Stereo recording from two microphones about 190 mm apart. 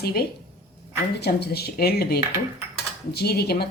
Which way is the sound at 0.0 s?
55° left (ahead or behind).